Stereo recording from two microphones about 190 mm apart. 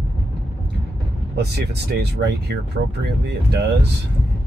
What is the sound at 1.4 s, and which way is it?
Speech, 60° right (ahead or behind).